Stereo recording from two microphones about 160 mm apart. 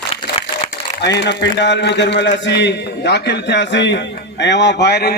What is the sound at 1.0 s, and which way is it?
A man's voice, 90° left.